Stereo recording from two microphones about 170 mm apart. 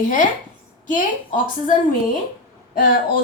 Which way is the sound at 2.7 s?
55° left (ahead or behind).